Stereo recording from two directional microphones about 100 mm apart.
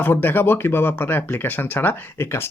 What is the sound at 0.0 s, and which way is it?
Speech, 20° left (ahead or behind).